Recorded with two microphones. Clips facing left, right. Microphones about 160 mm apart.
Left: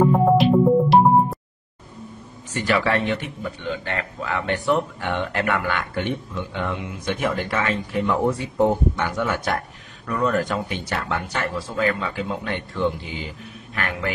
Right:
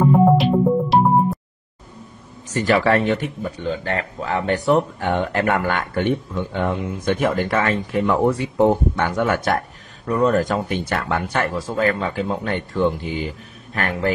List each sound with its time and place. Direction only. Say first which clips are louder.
0.0 s music: right 1 dB; centre (ahead or behind)
2.5 s speech: right 4 dB; 40° right (ahead or behind)
10.0 s a man's voice: right 4 dB; 30° right (ahead or behind)